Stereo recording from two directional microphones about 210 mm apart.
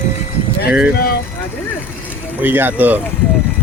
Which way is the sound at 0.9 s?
45° left (ahead or behind).